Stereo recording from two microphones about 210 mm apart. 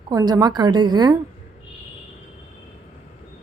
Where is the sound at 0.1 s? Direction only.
15° right (ahead or behind).